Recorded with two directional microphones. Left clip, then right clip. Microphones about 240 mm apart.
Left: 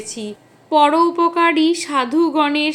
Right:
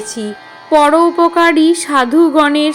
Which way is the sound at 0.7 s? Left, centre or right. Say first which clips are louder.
Right 4 dB; centre.